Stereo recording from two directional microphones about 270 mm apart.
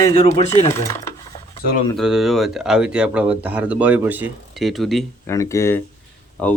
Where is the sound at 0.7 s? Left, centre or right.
Centre.